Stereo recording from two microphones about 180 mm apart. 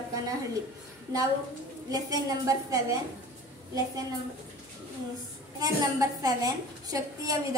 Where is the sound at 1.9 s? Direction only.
20° right (ahead or behind).